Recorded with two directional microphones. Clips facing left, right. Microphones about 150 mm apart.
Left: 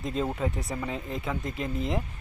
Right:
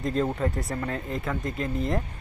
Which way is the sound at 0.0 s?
Centre (ahead or behind).